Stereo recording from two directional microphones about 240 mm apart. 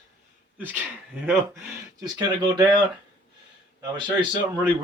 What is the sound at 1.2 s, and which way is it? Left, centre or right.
Speech, centre.